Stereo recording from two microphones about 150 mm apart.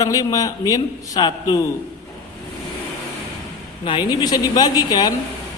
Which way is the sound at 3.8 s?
35° left (ahead or behind).